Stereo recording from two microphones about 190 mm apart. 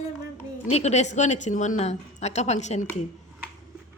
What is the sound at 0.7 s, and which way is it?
A woman's voice, 35° left (ahead or behind).